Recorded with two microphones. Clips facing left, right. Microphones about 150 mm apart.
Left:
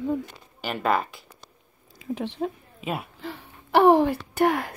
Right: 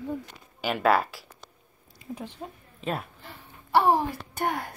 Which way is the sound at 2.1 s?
90° left.